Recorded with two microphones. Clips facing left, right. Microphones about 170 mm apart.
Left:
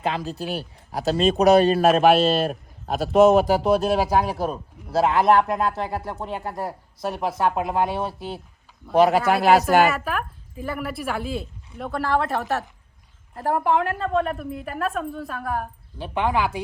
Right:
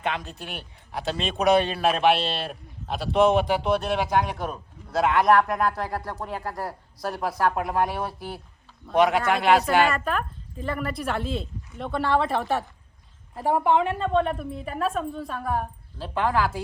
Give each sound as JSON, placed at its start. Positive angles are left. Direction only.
{"t": 0.0, "sound": "speech", "side_deg": 30}
{"t": 9.8, "sound": "a woman's voice", "side_deg": 5}
{"t": 16.0, "sound": "speech", "side_deg": 20}